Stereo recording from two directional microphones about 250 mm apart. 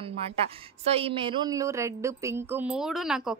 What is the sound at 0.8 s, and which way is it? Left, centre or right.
A woman's voice, right.